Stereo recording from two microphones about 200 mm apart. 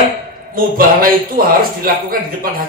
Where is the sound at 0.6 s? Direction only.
45° right (ahead or behind).